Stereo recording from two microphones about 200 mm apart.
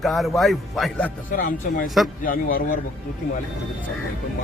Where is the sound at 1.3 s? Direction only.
45° left (ahead or behind).